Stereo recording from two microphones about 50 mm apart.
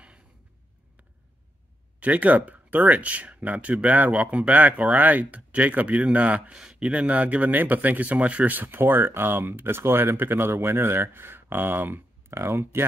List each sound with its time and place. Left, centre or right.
2.0 s speech: right